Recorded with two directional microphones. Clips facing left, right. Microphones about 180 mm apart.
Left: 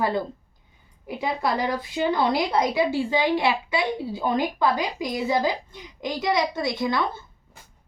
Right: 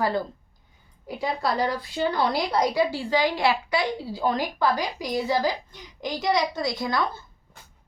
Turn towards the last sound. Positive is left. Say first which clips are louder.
# left 2 dB
turn(degrees=25)  # may be behind; listen again after turning